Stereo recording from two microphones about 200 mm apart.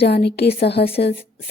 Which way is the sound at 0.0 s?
55° left (ahead or behind).